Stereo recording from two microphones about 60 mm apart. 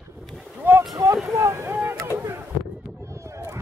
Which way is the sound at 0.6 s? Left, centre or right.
Right.